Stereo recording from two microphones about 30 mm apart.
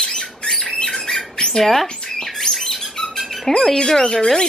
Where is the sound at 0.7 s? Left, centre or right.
Left.